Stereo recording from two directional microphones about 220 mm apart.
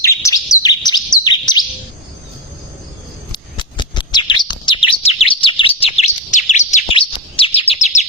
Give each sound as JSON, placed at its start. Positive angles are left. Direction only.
{"t": 0.0, "sound": "bird", "side_deg": 15}
{"t": 3.3, "sound": "bird", "side_deg": 20}